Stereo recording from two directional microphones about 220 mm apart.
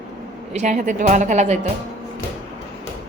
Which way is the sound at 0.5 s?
35° right (ahead or behind).